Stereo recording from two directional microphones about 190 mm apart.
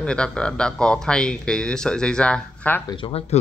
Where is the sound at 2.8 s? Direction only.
25° left (ahead or behind).